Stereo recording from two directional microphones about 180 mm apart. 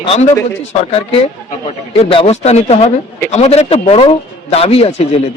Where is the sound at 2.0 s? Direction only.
30° left (ahead or behind).